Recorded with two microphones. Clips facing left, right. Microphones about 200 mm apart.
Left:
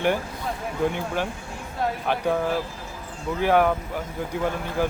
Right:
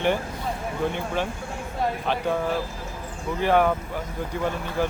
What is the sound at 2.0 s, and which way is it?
Speech, 10° left (ahead or behind).